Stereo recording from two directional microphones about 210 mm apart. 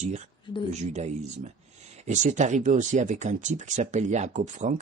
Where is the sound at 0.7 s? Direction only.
35° right (ahead or behind).